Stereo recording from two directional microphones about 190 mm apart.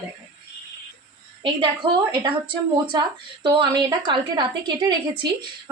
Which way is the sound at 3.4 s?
20° right (ahead or behind).